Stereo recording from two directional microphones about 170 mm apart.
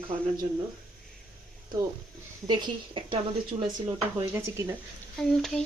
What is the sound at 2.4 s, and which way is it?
A woman's voice, 25° right (ahead or behind).